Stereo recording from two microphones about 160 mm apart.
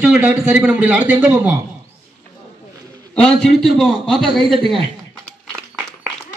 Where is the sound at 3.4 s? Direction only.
5° right (ahead or behind).